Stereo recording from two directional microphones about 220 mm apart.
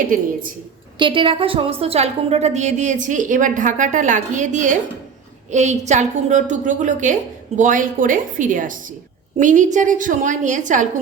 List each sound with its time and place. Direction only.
0.1 s a woman's voice: 40° right (ahead or behind)
0.9 s a woman's voice: 20° right (ahead or behind)